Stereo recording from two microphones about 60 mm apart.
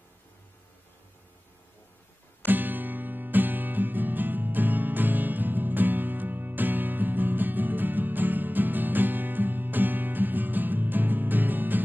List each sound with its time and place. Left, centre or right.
2.4 s music: right